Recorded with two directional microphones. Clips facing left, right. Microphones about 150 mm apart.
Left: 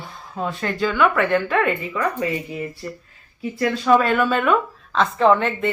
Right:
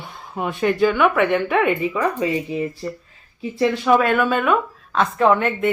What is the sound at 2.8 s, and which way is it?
Speech, 30° right (ahead or behind).